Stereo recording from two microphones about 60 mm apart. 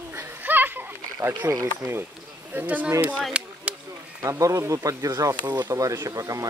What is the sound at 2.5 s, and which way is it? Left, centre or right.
Speech, right.